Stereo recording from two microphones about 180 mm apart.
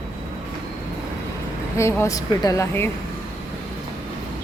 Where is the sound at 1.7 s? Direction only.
15° left (ahead or behind).